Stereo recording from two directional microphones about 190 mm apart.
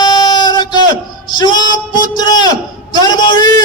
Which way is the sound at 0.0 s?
20° left (ahead or behind).